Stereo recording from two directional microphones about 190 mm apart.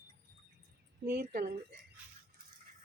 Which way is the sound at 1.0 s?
55° right (ahead or behind).